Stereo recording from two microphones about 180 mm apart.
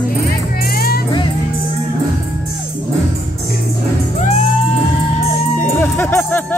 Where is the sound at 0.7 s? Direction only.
55° left (ahead or behind).